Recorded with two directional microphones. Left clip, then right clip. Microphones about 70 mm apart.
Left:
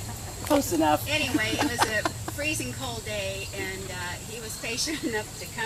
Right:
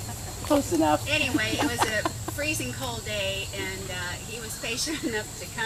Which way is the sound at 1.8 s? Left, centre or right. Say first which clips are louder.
Left 1 dB; left.